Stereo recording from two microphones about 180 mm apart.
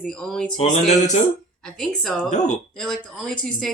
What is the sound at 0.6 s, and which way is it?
Speech, 40° left (ahead or behind).